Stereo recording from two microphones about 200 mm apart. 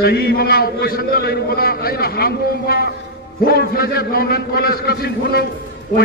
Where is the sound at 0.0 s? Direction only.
50° left (ahead or behind).